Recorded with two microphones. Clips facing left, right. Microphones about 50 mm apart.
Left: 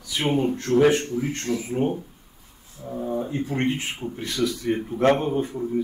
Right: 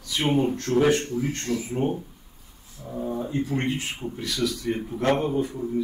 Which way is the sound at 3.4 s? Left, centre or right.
Left.